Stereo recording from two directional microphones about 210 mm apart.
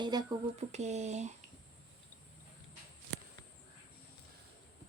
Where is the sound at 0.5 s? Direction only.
30° right (ahead or behind).